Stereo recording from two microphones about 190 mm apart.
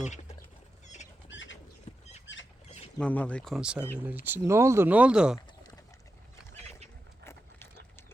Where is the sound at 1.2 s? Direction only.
75° left (ahead or behind).